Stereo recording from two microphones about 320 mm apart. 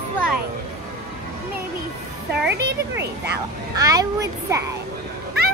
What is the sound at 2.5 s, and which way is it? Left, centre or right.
Speech, right.